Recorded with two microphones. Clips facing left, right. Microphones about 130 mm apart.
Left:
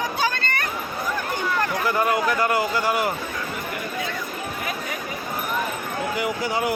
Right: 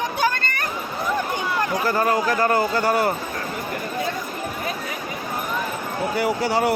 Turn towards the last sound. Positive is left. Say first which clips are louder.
# right 4 dB
turn(degrees=-30)  # may be behind; listen again after turning